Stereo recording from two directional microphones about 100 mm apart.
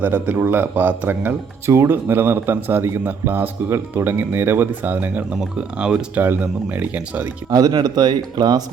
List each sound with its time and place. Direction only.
0.0 s speech: 20° right (ahead or behind)
7.5 s a man's voice: 45° right (ahead or behind)